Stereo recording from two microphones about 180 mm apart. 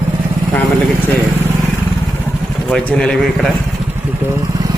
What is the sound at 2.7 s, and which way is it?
Speech, 5° left (ahead or behind).